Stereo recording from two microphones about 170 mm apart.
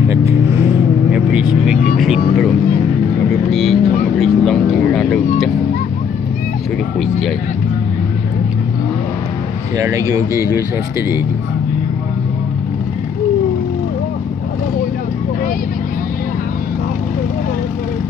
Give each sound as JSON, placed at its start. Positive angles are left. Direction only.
{"t": 0.1, "sound": "vehicle", "side_deg": -15}
{"t": 2.0, "sound": "music", "side_deg": 0}
{"t": 3.3, "sound": "vehicle", "side_deg": 0}
{"t": 7.0, "sound": "a sound", "side_deg": 0}
{"t": 9.8, "sound": "speech", "side_deg": -20}